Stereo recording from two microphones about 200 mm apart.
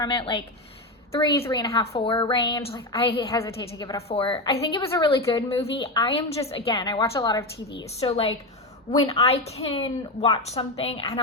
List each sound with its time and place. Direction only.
0.0 s a woman's voice: 25° left (ahead or behind)
3.3 s a woman's voice: 15° left (ahead or behind)
4.8 s a woman's voice: 15° left (ahead or behind)
5.0 s a woman's voice: 30° left (ahead or behind)